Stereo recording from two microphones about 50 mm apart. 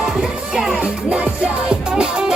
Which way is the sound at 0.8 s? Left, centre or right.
Right.